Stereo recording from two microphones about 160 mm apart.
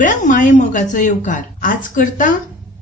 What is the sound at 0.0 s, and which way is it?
A woman's voice, 55° left (ahead or behind).